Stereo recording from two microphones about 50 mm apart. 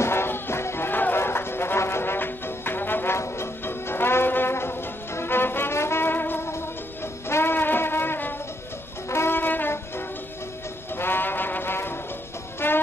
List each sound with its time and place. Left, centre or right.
0.0 s music: left
3.2 s music: left
9.1 s wind instrument: left
11.0 s brass instrument: left
12.5 s music: left